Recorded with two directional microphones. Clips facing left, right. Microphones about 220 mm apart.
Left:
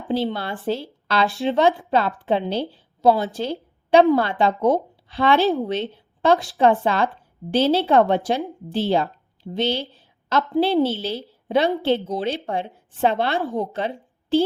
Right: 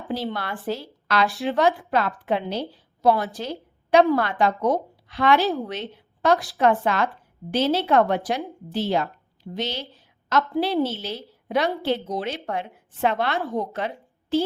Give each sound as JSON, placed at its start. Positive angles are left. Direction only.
{"t": 0.1, "sound": "a woman's voice", "side_deg": 25}
{"t": 5.9, "sound": "a sound", "side_deg": 30}
{"t": 6.6, "sound": "a woman's voice", "side_deg": 30}